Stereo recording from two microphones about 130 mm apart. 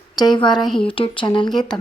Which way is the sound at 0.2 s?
35° left (ahead or behind).